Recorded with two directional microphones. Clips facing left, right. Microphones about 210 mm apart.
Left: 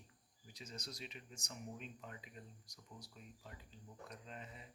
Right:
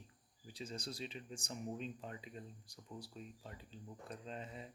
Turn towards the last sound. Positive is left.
turn(degrees=-30)  # may be behind; listen again after turning